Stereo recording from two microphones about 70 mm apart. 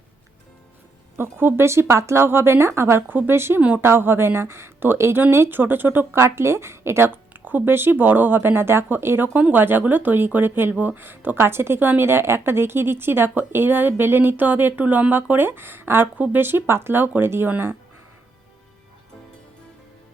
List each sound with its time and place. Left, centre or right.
1.1 s speech: right
6.2 s speech: right